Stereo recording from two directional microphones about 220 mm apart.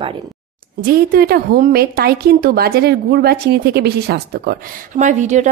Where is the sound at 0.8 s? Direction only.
45° right (ahead or behind).